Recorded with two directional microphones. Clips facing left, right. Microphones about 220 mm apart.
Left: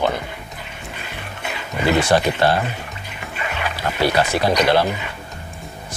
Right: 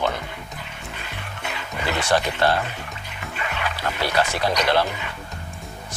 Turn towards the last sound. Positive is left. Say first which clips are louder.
# left 4 dB
turn(degrees=10)  # may be behind; listen again after turning